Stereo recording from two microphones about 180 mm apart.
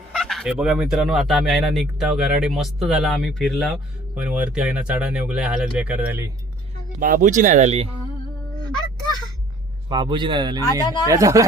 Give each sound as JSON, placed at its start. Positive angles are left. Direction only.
{"t": 0.2, "sound": "speech", "side_deg": 0}
{"t": 7.0, "sound": "speech", "side_deg": -50}
{"t": 9.9, "sound": "a man's voice", "side_deg": -25}